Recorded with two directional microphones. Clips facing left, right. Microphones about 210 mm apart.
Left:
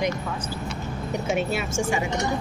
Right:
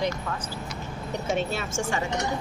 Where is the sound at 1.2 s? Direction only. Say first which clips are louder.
Left 2 dB; 10° left (ahead or behind).